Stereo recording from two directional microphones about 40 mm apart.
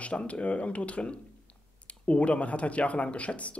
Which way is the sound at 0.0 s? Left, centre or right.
Left.